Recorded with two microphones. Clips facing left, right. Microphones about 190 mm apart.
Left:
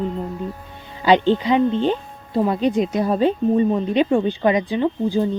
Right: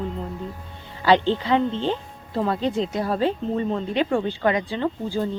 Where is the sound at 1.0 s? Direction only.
15° left (ahead or behind).